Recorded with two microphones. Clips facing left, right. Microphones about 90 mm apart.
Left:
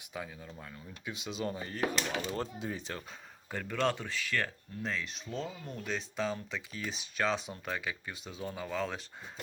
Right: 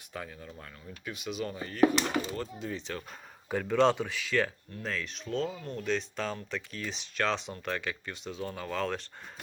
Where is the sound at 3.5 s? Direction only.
15° right (ahead or behind).